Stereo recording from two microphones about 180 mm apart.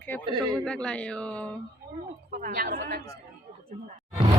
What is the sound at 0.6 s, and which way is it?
A woman's voice, 5° left (ahead or behind).